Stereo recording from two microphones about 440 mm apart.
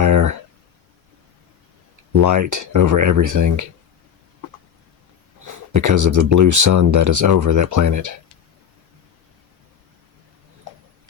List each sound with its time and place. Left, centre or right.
0.0 s a sound: right
2.1 s speech: right
5.5 s speech: right